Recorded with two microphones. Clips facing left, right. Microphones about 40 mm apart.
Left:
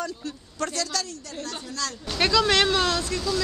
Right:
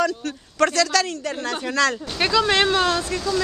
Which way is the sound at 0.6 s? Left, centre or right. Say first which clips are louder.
Right 10 dB; right.